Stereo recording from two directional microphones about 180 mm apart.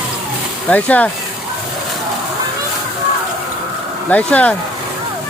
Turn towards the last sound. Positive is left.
turn(degrees=10)  # may be behind; listen again after turning